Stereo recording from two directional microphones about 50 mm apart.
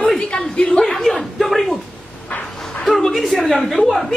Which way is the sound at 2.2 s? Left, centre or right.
Left.